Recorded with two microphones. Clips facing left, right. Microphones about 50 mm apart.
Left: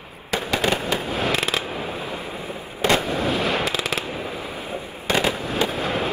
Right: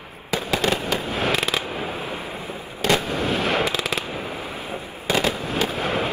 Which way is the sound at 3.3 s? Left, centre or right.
Right.